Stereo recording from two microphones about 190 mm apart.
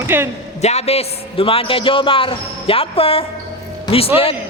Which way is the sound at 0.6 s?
35° left (ahead or behind).